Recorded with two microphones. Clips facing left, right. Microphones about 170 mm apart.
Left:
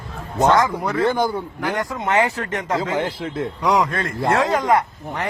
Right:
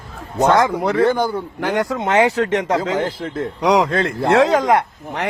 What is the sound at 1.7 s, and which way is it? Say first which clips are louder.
Speech: right 4 dB; 90° right.